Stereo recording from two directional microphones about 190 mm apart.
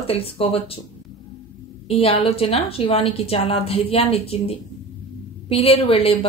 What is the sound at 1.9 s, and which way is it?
A woman's voice, 30° left (ahead or behind).